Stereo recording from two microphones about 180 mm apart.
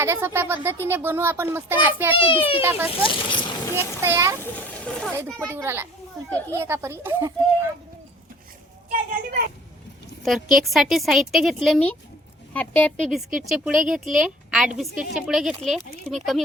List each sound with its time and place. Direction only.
0.0 s speech: 15° right (ahead or behind)
2.1 s a child's voice: 30° left (ahead or behind)
2.6 s speech: 10° right (ahead or behind)
2.9 s speech: 30° left (ahead or behind)
4.0 s speech: 15° right (ahead or behind)
4.4 s speech: 10° left (ahead or behind)
5.1 s speech: 15° right (ahead or behind)
8.9 s children playing: 50° right (ahead or behind)
10.2 s speech: centre (ahead or behind)